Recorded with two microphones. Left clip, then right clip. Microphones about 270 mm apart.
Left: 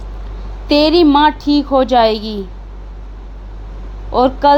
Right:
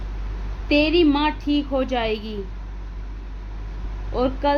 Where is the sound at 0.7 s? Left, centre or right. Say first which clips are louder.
Left 8 dB; left.